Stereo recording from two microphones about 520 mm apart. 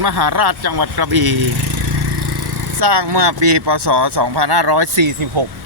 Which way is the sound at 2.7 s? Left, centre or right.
Right.